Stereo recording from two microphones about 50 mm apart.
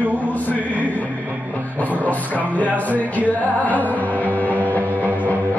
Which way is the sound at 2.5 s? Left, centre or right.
Left.